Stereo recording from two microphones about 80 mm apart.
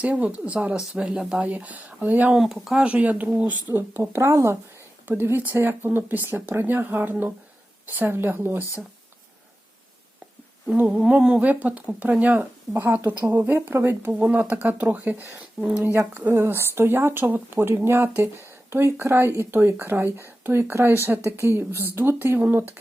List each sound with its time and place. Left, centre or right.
0.0 s speech: centre
1.5 s speech: centre
2.3 s speech: centre
2.8 s speech: centre
3.7 s speech: right
10.8 s speech: centre; by 14.1 s right
14.1 s speech: centre